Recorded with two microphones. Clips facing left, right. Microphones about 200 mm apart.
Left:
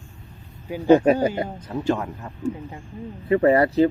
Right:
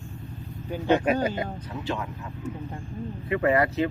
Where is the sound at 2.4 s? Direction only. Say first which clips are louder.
Left 7 dB; 30° left (ahead or behind).